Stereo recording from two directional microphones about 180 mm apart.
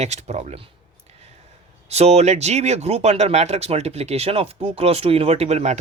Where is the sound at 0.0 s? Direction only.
40° right (ahead or behind).